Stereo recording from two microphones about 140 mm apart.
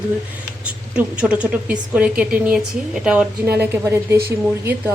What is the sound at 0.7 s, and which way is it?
A woman's voice, 10° right (ahead or behind).